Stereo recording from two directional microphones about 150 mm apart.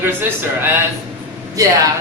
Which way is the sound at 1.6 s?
25° right (ahead or behind).